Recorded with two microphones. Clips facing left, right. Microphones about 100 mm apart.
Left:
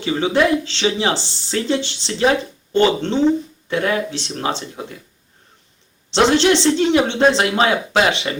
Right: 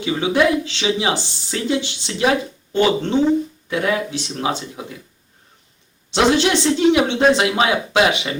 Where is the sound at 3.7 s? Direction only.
10° right (ahead or behind).